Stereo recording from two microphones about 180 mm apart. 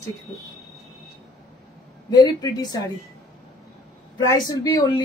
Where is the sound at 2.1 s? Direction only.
20° left (ahead or behind).